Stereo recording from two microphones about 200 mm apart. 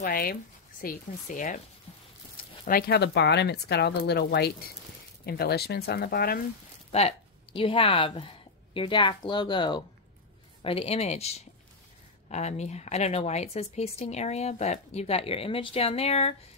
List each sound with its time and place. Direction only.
0.0 s speech: 45° left (ahead or behind)
2.6 s speech: 50° left (ahead or behind)
6.9 s a woman's voice: 30° left (ahead or behind)